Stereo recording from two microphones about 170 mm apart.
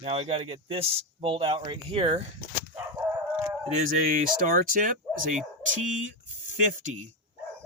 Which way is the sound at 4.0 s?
55° right (ahead or behind).